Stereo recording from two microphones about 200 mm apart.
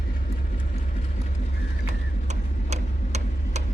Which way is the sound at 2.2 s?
35° right (ahead or behind).